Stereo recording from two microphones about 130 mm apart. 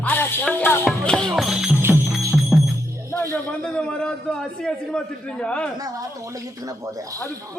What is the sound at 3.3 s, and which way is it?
Speech, 10° left (ahead or behind).